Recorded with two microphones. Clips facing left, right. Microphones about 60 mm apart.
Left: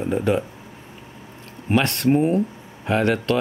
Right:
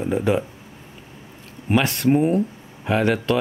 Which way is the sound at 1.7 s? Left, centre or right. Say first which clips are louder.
Even; centre.